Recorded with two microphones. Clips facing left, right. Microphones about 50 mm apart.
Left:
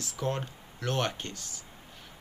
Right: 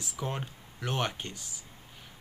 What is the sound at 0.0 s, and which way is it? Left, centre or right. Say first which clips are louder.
Speech: left 3 dB; centre.